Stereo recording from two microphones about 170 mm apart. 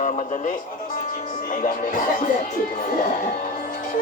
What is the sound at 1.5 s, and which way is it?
Speech, 50° left (ahead or behind).